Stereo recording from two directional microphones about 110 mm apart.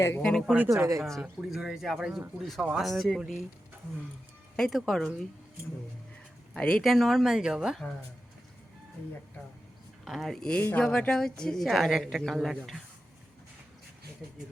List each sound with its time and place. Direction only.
0.2 s a woman's voice: 5° left (ahead or behind)
0.7 s speech: 30° right (ahead or behind)
1.0 s a woman's voice: 5° left (ahead or behind)
4.5 s a woman's voice: centre (ahead or behind)
6.5 s a woman's voice: 10° left (ahead or behind)
10.0 s a woman's voice: centre (ahead or behind)